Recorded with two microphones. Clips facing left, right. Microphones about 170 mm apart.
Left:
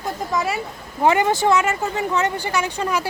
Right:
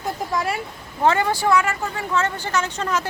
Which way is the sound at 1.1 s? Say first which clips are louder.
Left 2 dB; 20° left (ahead or behind).